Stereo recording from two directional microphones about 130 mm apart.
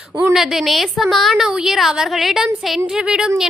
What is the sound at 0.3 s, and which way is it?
A woman's voice, centre (ahead or behind).